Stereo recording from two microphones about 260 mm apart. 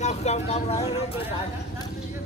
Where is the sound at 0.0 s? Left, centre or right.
Left.